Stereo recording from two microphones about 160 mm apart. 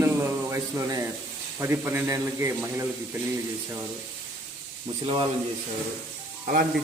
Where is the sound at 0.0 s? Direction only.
15° right (ahead or behind).